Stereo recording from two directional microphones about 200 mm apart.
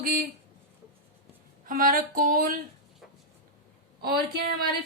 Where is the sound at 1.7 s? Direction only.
45° right (ahead or behind).